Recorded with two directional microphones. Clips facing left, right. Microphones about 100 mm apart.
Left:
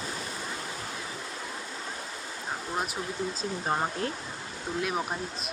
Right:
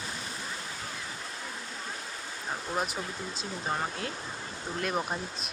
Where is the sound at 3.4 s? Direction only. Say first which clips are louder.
Left 2 dB; 35° left (ahead or behind).